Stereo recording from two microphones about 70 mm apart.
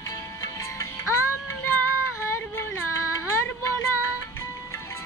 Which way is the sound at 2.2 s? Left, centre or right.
Left.